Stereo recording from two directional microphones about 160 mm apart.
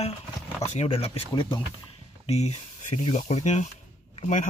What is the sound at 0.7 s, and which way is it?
Speech, 35° left (ahead or behind).